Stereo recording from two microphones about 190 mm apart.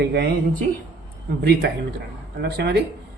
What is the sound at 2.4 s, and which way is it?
Speech, 60° right (ahead or behind).